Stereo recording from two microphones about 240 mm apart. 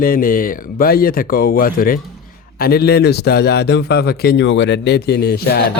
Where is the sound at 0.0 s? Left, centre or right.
Left.